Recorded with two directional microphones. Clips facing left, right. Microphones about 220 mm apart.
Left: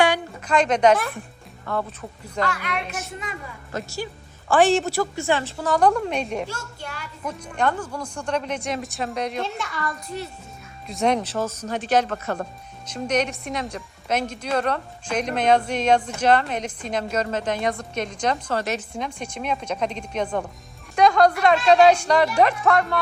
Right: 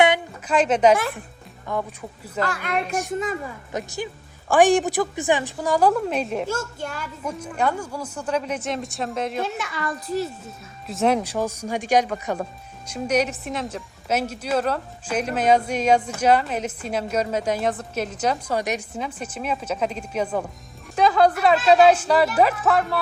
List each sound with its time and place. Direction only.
0.4 s a woman's voice: 5° right (ahead or behind)
2.4 s a woman's voice: 45° right (ahead or behind)
3.7 s a woman's voice: 20° right (ahead or behind); by 6.5 s centre (ahead or behind)
6.5 s speech: 45° right (ahead or behind)
7.3 s speech: 5° right (ahead or behind)
10.8 s a woman's voice: 5° right (ahead or behind)